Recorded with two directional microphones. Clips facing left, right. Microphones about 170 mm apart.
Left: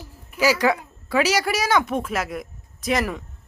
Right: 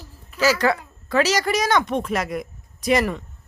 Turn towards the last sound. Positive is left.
turn(degrees=0)  # may be behind; listen again after turning